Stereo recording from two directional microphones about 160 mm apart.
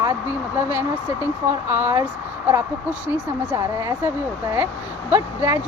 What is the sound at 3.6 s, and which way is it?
Speech, 20° right (ahead or behind).